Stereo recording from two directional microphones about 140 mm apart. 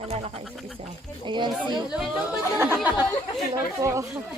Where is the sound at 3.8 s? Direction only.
20° right (ahead or behind).